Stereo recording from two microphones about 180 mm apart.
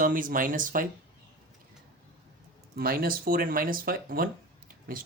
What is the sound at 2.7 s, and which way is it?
Speech, 55° right (ahead or behind).